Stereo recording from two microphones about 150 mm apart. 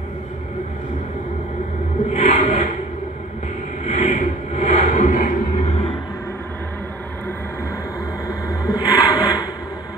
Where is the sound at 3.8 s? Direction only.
50° left (ahead or behind).